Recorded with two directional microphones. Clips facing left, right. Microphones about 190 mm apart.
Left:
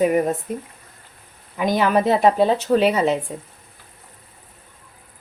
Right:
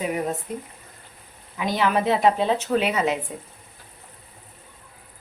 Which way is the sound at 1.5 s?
45° left (ahead or behind).